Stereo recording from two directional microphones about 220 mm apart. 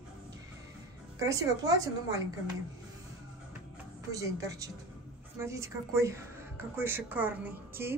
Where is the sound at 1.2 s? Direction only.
15° right (ahead or behind).